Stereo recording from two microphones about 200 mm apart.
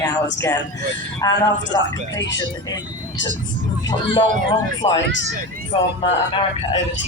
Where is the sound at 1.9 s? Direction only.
65° left (ahead or behind).